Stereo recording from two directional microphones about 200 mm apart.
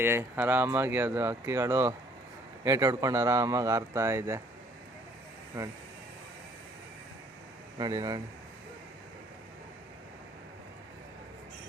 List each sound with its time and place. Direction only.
0.0 s speech: 10° right (ahead or behind)
5.5 s speech: 15° right (ahead or behind)
7.8 s speech: 20° right (ahead or behind)